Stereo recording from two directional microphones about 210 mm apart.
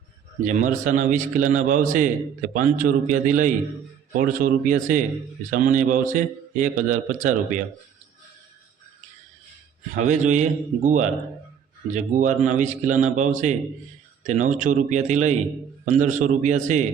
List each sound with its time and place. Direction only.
0.4 s a man's voice: 35° right (ahead or behind)
9.9 s a man's voice: 35° right (ahead or behind)